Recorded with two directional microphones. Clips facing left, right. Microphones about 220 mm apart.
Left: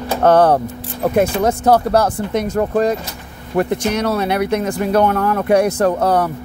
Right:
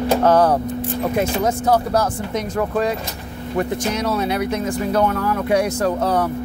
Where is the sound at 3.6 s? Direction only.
60° left (ahead or behind).